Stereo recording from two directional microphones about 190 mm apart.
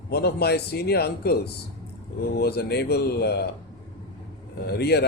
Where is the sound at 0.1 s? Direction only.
60° left (ahead or behind).